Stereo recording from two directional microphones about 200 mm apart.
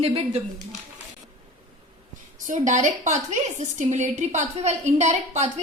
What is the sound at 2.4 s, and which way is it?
A woman's voice, 40° right (ahead or behind).